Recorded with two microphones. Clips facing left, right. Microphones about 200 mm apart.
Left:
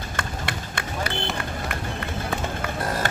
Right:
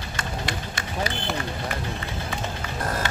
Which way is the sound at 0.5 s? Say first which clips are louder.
Even; 55° left (ahead or behind).